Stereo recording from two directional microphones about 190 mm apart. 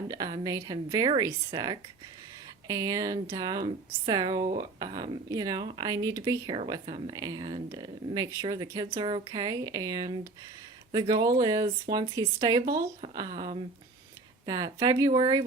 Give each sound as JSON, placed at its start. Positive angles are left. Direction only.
{"t": 0.1, "sound": "speech", "side_deg": -20}
{"t": 14.4, "sound": "speech", "side_deg": -20}